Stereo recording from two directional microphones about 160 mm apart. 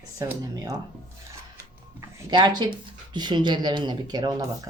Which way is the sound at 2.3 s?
25° right (ahead or behind).